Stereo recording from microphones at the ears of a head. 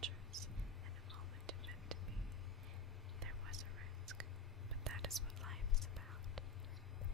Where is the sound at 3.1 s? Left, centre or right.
Right.